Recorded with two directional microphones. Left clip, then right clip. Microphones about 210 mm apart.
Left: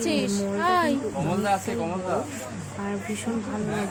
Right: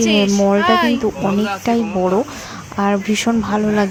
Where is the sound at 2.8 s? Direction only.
35° right (ahead or behind).